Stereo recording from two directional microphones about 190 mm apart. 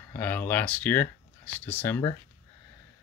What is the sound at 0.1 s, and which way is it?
Speech, 10° left (ahead or behind).